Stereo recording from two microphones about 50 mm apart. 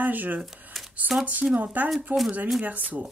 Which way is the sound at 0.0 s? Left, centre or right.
Right.